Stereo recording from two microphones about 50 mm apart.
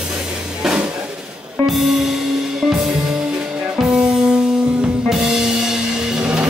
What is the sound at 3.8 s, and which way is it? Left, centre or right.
Music, centre.